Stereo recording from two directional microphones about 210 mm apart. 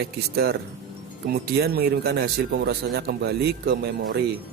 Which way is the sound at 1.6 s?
50° right (ahead or behind).